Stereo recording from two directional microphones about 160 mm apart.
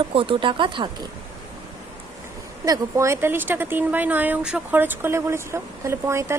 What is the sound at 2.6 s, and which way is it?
Speech, 20° right (ahead or behind).